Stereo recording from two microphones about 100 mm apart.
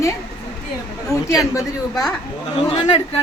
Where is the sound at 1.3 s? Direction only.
35° left (ahead or behind).